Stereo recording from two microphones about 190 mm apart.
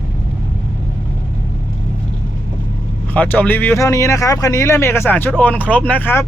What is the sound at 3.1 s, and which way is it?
Speech, 10° left (ahead or behind).